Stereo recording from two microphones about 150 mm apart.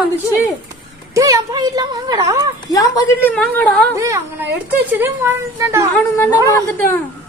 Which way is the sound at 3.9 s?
20° right (ahead or behind).